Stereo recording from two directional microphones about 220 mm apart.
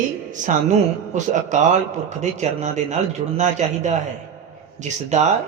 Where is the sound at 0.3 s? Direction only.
35° right (ahead or behind).